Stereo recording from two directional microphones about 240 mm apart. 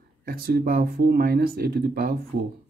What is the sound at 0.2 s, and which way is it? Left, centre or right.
Speech, right.